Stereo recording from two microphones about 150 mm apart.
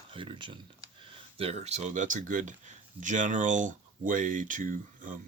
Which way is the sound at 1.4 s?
45° right (ahead or behind).